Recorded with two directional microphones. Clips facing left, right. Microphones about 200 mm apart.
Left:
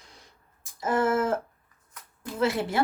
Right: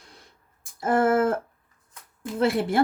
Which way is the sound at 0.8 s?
55° right (ahead or behind).